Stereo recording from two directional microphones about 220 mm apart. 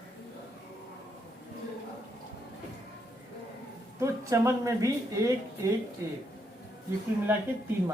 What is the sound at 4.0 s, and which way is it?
Speech, 15° right (ahead or behind).